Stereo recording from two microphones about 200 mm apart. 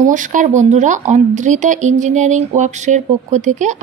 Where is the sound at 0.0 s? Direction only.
40° right (ahead or behind).